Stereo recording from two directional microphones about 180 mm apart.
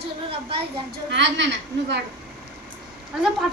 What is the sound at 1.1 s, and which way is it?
Speech, 80° right.